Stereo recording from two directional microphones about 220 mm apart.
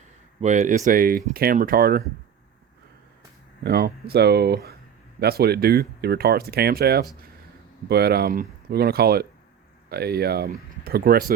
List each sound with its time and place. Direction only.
0.4 s speech: 35° right (ahead or behind)
3.6 s speech: 45° right (ahead or behind)